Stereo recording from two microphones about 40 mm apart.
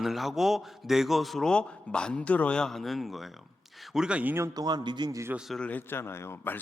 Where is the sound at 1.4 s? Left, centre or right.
Left.